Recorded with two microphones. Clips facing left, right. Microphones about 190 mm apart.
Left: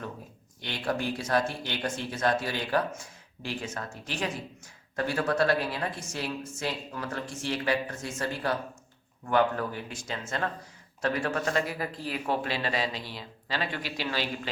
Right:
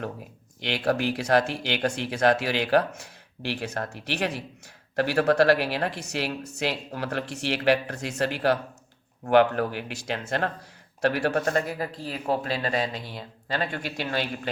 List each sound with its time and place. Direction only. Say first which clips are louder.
0.6 s a woman's voice: right 6 dB; 85° right
3.4 s a woman's voice: right 5 dB; 70° right (ahead or behind); by 14.5 s 55° right (ahead or behind)